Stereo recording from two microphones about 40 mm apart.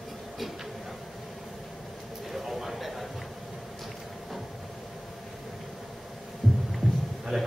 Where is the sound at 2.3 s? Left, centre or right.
Centre.